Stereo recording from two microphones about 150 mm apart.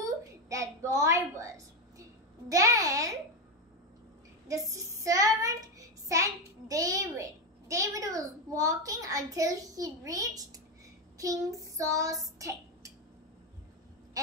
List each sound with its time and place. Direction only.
0.0 s a sound: 20° right (ahead or behind)
2.5 s a child's voice: 20° right (ahead or behind)
4.5 s child singing: 20° right (ahead or behind)
6.7 s a child's voice: 20° right (ahead or behind)
11.1 s child singing: 25° right (ahead or behind)